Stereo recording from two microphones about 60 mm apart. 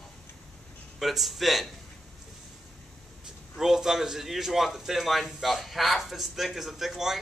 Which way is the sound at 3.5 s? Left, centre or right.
Centre.